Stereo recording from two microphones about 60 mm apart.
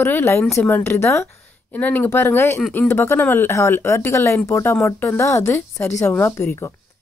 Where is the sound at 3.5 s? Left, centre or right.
Left.